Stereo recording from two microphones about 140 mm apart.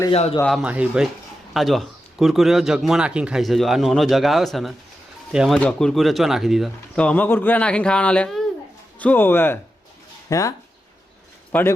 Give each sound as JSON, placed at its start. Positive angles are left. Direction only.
{"t": 0.1, "sound": "speech", "side_deg": 45}
{"t": 0.6, "sound": "speech", "side_deg": -10}
{"t": 5.5, "sound": "speech", "side_deg": 5}
{"t": 11.5, "sound": "speech", "side_deg": 10}